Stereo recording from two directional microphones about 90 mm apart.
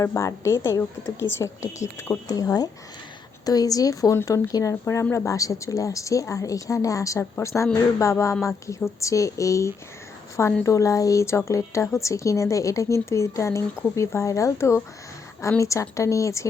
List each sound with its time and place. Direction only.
0.0 s speech: 30° left (ahead or behind)